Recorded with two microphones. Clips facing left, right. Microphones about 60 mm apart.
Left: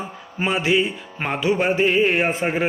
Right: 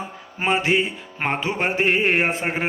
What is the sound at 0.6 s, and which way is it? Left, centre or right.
Music, right.